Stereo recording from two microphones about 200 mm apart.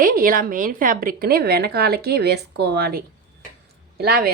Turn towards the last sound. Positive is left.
turn(degrees=-50)  # may be behind; listen again after turning